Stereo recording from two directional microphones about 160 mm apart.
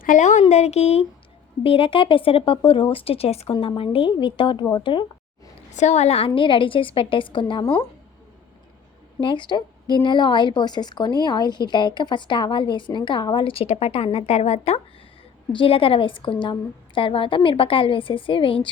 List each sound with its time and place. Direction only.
0.0 s a woman's voice: 50° left (ahead or behind); by 5.0 s 30° left (ahead or behind)
5.7 s a woman's voice: 45° left (ahead or behind); by 7.9 s 30° left (ahead or behind)
9.2 s a woman's voice: 30° left (ahead or behind)